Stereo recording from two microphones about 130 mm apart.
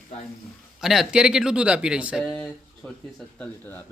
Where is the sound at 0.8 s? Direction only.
5° right (ahead or behind).